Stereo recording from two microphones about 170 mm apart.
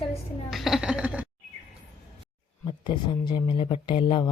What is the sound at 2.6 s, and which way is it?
Speech, 25° left (ahead or behind).